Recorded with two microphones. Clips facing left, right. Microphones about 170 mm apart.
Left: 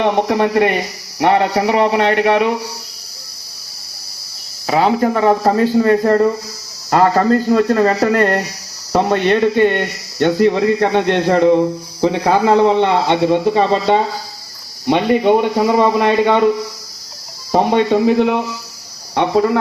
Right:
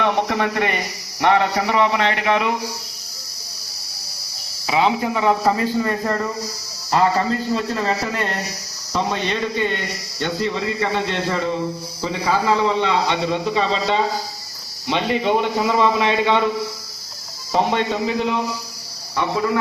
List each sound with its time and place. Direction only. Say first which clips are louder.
0.0 s a man's voice: left 5 dB; 40° left (ahead or behind)
4.6 s a man's voice: left 5 dB; 45° left (ahead or behind)
6.9 s a man's voice: left 6 dB; 50° left (ahead or behind)
17.5 s a man's voice: left 6 dB; 50° left (ahead or behind)